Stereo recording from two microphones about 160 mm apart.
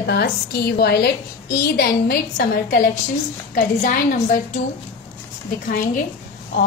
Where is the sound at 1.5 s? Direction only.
70° left (ahead or behind).